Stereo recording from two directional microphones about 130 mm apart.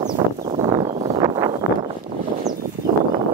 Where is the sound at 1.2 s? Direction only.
30° right (ahead or behind).